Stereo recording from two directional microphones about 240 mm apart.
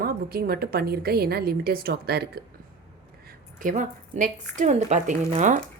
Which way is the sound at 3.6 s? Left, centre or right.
Right.